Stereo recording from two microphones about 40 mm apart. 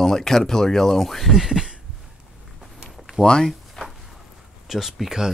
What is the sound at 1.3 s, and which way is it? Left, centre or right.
Speech, centre.